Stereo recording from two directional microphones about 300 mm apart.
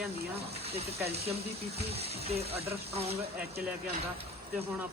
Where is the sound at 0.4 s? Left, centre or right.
Centre.